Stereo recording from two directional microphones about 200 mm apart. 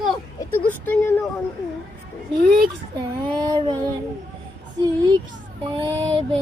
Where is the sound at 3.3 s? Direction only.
20° right (ahead or behind).